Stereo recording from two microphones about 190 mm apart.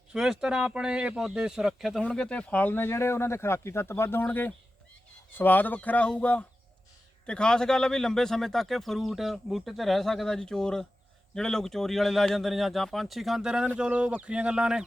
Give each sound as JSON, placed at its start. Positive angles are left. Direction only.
{"t": 0.1, "sound": "speech", "side_deg": -5}